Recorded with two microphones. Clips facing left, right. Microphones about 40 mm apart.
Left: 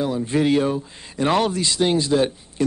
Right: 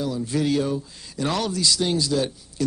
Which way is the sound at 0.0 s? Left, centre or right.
Left.